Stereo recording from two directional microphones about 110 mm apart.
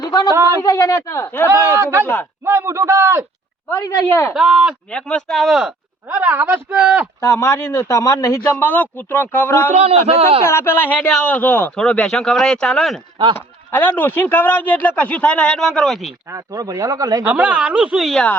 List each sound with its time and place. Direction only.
0.0 s a sound: 35° left (ahead or behind)
0.6 s a man's voice: 30° left (ahead or behind)
1.7 s a man's voice: 25° right (ahead or behind)
3.7 s a man's voice: 20° left (ahead or behind)
4.4 s speech: 5° right (ahead or behind)
4.9 s a woman's voice: 10° left (ahead or behind); by 7.1 s 10° right (ahead or behind)
7.2 s a man's voice: 25° left (ahead or behind)
9.7 s a man's voice: 60° right (ahead or behind)
10.4 s a man's voice: 25° left (ahead or behind)
11.8 s speech: 5° left (ahead or behind)
13.3 s speech: 20° left (ahead or behind); by 16.1 s centre (ahead or behind)
16.3 s speech: 35° right (ahead or behind)
17.2 s a woman's voice: 10° right (ahead or behind)